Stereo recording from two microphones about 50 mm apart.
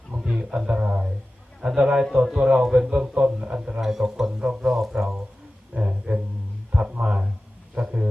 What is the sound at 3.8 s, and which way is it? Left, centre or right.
Speech, centre.